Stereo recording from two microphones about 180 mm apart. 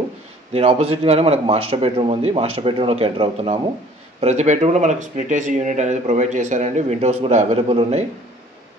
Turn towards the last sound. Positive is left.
turn(degrees=-35)  # may be behind; listen again after turning